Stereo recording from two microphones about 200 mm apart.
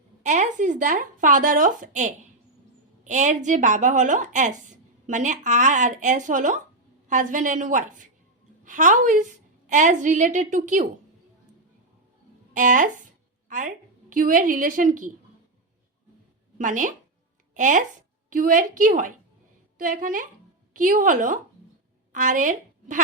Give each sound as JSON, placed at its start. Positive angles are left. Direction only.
{"t": 0.2, "sound": "a woman's voice", "side_deg": -40}
{"t": 12.5, "sound": "a woman's voice", "side_deg": -40}
{"t": 16.6, "sound": "a woman's voice", "side_deg": -40}